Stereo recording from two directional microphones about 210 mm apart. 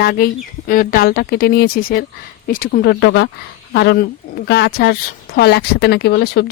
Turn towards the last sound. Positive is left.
turn(degrees=50)  # may be behind; listen again after turning